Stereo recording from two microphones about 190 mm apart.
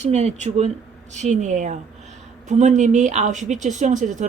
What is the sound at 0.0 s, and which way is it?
Speech, 35° right (ahead or behind).